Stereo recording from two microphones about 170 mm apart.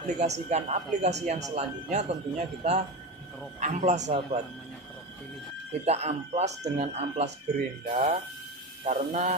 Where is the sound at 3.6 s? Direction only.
45° right (ahead or behind).